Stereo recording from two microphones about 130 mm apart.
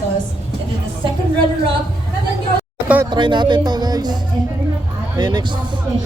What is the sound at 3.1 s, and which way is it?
A man's voice, 35° right (ahead or behind).